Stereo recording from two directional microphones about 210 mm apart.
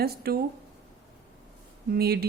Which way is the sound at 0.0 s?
45° right (ahead or behind).